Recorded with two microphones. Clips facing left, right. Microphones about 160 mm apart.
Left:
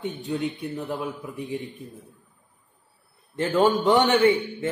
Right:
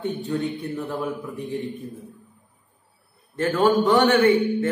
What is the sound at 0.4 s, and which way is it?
A man's voice, 15° left (ahead or behind).